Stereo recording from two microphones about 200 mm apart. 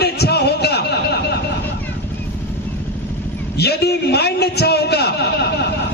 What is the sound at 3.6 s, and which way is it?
A man's voice, 55° left (ahead or behind).